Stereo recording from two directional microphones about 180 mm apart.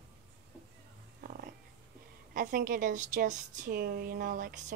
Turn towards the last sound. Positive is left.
turn(degrees=-50)  # may be behind; listen again after turning